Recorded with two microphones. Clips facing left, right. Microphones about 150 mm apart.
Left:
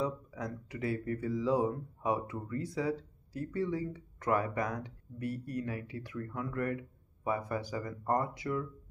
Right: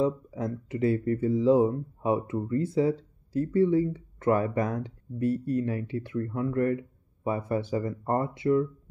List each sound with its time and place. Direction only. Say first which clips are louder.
0.0 s speech: right 8 dB; 25° right (ahead or behind)